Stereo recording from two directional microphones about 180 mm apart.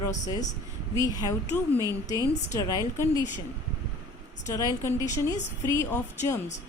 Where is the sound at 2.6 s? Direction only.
15° left (ahead or behind).